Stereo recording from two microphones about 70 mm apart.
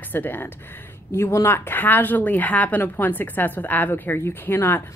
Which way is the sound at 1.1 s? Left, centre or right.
Left.